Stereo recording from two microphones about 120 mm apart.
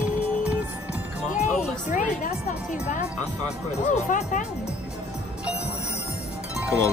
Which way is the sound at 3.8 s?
90° left.